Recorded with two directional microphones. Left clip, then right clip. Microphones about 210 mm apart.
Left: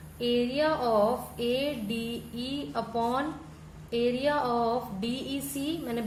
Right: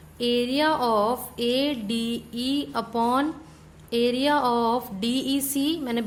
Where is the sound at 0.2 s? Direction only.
50° right (ahead or behind).